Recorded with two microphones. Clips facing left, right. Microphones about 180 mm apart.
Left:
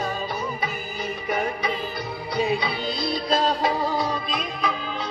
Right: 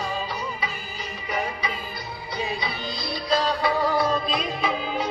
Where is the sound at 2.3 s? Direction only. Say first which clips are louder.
Left 6 dB; 60° left (ahead or behind).